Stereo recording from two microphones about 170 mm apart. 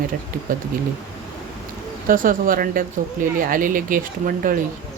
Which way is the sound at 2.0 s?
55° right (ahead or behind).